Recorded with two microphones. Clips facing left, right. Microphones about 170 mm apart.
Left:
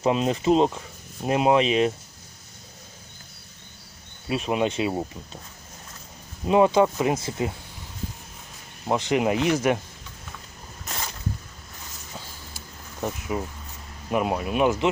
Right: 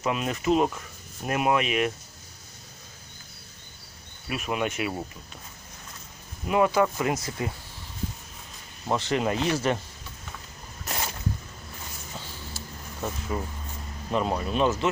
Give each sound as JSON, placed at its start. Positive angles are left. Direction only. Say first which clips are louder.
{"t": 0.0, "sound": "speech", "louder": "left 5 dB", "side_deg": 30}
{"t": 4.3, "sound": "speech", "louder": "left 5 dB", "side_deg": 25}
{"t": 6.4, "sound": "speech", "louder": "left 4 dB", "side_deg": 25}
{"t": 8.9, "sound": "speech", "louder": "left 3 dB", "side_deg": 15}
{"t": 12.5, "sound": "a sound", "louder": "left 3 dB", "side_deg": 15}
{"t": 14.1, "sound": "speech", "louder": "left 2 dB", "side_deg": 10}